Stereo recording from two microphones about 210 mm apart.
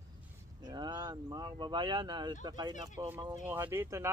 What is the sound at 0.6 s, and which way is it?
Speech, 20° right (ahead or behind).